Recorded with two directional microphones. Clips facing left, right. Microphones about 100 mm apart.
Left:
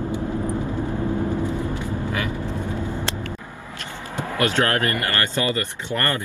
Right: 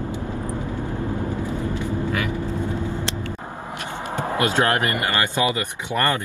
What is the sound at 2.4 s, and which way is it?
Vehicle, 15° left (ahead or behind).